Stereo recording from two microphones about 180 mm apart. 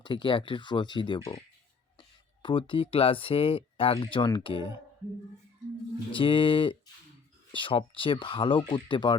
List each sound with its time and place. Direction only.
0.0 s speech: 25° left (ahead or behind)
6.1 s speech: 30° left (ahead or behind)